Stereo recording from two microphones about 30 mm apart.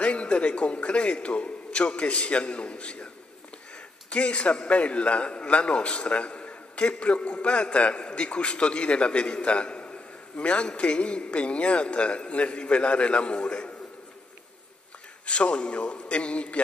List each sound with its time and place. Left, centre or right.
0.0 s a sound: left
0.3 s a man's voice: left
4.1 s a man's voice: left
9.5 s a sound: left
10.8 s a man's voice: left
15.2 s a man's voice: left